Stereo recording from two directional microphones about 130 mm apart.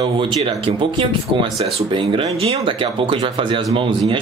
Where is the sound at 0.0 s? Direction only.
45° right (ahead or behind).